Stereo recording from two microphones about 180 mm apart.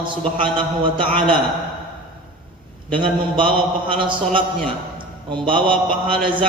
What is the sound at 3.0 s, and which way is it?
A man's voice, 30° right (ahead or behind).